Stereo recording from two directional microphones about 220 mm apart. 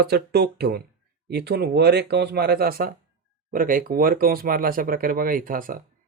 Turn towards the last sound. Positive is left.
turn(degrees=-40)  # may be behind; listen again after turning